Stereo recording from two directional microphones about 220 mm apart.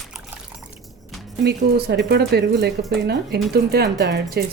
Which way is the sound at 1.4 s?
50° right (ahead or behind).